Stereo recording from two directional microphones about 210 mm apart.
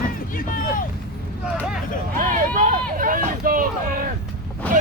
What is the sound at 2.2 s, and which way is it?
Speech, 40° right (ahead or behind).